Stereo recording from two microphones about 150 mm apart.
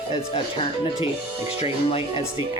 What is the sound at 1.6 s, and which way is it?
Speech, 40° left (ahead or behind).